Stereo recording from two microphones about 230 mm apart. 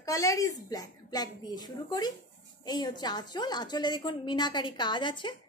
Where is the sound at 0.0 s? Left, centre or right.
Centre.